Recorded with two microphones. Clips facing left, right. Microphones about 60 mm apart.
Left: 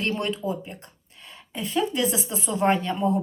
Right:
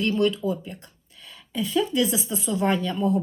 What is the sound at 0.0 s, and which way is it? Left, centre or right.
A woman's voice, left.